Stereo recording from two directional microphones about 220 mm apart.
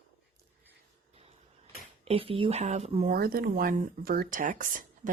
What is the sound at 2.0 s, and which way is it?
Speech, 25° right (ahead or behind).